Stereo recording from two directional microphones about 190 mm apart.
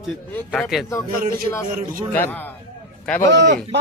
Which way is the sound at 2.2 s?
10° left (ahead or behind).